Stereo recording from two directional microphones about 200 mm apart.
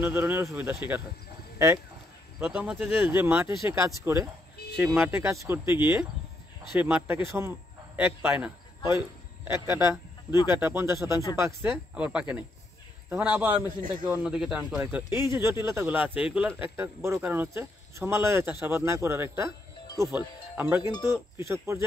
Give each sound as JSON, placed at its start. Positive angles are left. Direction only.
{"t": 0.0, "sound": "speech", "side_deg": -10}
{"t": 2.4, "sound": "a man's voice", "side_deg": -5}